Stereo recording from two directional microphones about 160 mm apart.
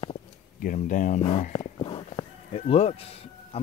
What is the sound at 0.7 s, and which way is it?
Speech, 55° left (ahead or behind).